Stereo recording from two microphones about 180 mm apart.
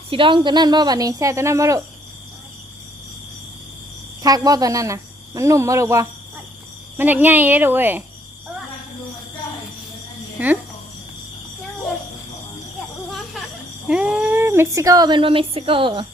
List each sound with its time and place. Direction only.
0.1 s speech: 30° right (ahead or behind)
4.2 s speech: 20° right (ahead or behind)
10.4 s speech: 10° right (ahead or behind)
13.1 s a sound: centre (ahead or behind)
13.8 s speech: 5° right (ahead or behind); by 16.0 s 30° right (ahead or behind)